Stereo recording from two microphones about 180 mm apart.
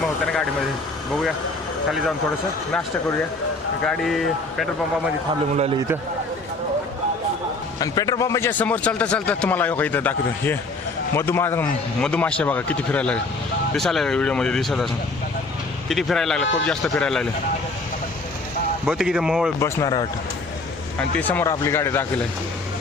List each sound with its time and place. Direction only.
3.8 s speech: centre (ahead or behind)
7.8 s a man's voice: 20° left (ahead or behind); by 14.8 s centre (ahead or behind)
15.9 s speech: centre (ahead or behind)
18.9 s speech: 5° right (ahead or behind)
19.5 s a man's voice: 15° left (ahead or behind)
21.2 s a man's voice: 10° left (ahead or behind)